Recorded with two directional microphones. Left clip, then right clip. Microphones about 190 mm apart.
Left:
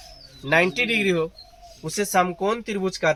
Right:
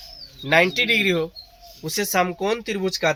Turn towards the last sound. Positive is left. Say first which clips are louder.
# right 1 dB
turn(degrees=-30)  # may be behind; listen again after turning